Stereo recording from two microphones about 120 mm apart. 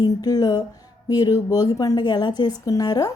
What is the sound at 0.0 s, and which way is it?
A woman's voice, 35° left (ahead or behind).